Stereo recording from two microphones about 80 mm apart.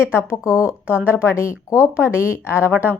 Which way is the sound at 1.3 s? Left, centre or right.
Left.